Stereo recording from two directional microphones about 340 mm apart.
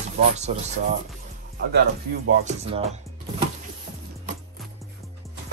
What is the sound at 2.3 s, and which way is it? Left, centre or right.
Speech, centre.